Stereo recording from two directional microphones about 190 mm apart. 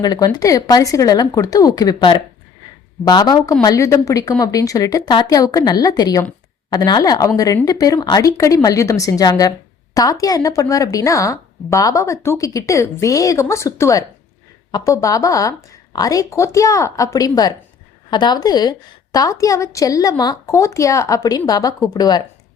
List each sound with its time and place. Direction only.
0.0 s a woman's voice: 20° left (ahead or behind)